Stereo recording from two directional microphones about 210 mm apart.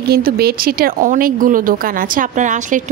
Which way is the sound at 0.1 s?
45° right (ahead or behind).